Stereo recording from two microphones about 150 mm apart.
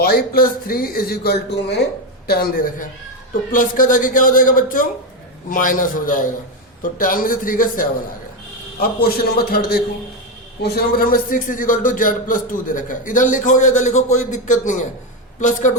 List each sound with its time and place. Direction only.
0.0 s a man's voice: 80° left
8.8 s a man's voice: 90° left; by 15.7 s 55° left (ahead or behind)